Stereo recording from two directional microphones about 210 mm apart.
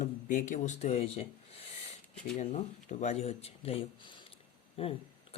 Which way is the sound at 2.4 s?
35° left (ahead or behind).